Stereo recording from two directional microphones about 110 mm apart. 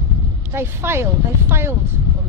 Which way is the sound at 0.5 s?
20° right (ahead or behind).